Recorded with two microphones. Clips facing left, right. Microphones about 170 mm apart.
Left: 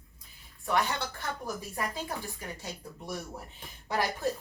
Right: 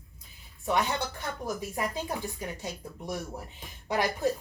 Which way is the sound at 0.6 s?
20° right (ahead or behind).